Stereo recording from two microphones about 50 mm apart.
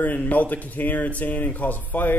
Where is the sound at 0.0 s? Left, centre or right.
Left.